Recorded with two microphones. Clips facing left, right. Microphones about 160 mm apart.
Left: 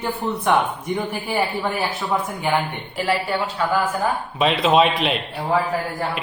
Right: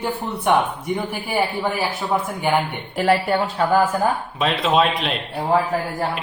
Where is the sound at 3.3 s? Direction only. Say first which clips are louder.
Right 3 dB; 50° right (ahead or behind).